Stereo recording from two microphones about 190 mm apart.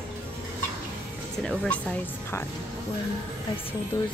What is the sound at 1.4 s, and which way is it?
Speech, 5° left (ahead or behind).